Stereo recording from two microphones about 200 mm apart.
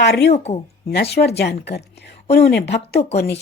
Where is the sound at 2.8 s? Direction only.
30° left (ahead or behind).